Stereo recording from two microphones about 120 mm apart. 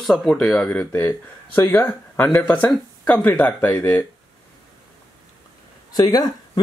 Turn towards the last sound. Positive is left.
turn(degrees=35)  # may be behind; listen again after turning